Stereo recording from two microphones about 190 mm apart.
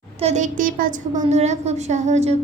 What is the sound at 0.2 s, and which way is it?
A woman's voice, 35° right (ahead or behind).